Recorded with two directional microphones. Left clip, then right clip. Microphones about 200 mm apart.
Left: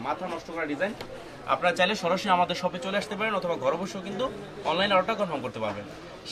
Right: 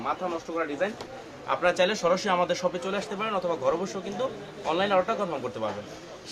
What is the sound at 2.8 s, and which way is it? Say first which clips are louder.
A man's voice: left 1 dB; 10° right (ahead or behind).